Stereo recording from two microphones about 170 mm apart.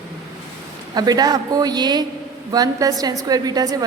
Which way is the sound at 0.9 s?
25° right (ahead or behind).